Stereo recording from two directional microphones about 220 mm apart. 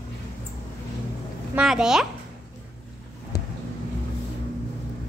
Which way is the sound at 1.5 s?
Centre (ahead or behind).